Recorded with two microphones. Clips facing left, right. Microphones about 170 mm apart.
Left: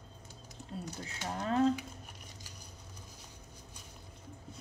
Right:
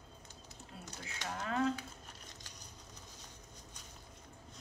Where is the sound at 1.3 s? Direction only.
35° left (ahead or behind).